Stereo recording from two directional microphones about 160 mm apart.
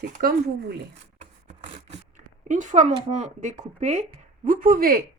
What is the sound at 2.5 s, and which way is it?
Speech, 50° right (ahead or behind).